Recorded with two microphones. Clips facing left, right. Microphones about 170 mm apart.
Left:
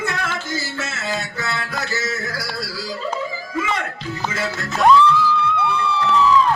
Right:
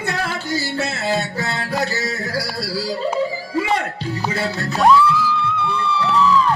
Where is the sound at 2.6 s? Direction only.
35° right (ahead or behind).